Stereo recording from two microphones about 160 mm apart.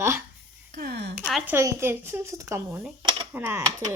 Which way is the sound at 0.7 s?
80° right.